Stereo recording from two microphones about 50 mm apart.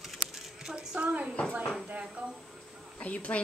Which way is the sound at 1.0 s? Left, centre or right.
Right.